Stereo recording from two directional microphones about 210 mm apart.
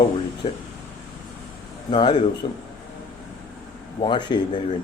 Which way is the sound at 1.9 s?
20° left (ahead or behind).